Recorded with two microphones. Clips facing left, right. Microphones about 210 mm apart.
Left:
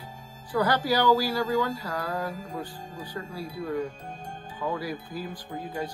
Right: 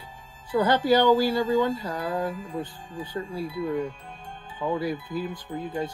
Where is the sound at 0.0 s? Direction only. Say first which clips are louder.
Left 3 dB; 40° left (ahead or behind).